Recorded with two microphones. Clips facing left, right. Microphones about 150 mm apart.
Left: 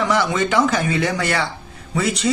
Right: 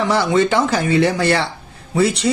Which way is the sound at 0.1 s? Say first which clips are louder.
Right 3 dB; 30° right (ahead or behind).